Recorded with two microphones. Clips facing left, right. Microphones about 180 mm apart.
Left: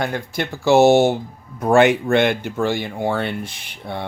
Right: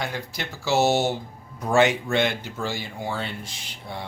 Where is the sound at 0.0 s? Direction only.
55° left (ahead or behind).